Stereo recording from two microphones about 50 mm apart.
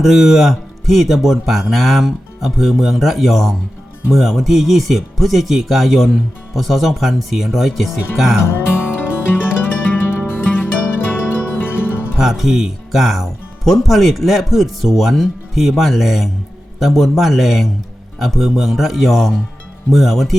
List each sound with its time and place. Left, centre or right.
0.0 s speech: centre
8.7 s music: left
12.2 s speech: centre